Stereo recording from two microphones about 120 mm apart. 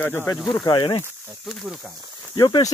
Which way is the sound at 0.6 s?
40° left (ahead or behind).